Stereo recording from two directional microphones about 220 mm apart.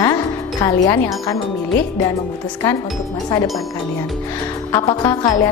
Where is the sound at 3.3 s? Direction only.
15° left (ahead or behind).